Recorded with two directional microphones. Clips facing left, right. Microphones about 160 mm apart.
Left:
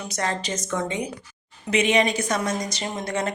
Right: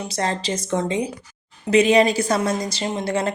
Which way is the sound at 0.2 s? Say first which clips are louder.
Right 3 dB; 30° right (ahead or behind).